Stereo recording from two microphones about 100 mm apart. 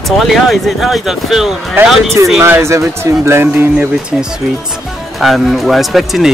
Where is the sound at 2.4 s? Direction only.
30° right (ahead or behind).